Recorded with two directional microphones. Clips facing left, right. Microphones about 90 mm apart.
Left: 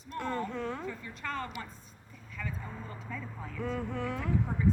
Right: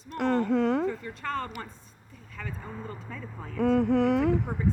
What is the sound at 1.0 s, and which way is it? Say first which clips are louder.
Speech: right 5 dB; 40° right (ahead or behind).